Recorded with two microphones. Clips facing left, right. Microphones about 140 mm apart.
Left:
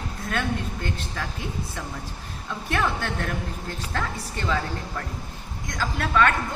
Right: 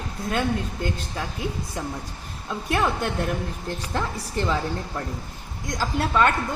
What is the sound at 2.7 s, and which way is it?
Speech, 20° right (ahead or behind).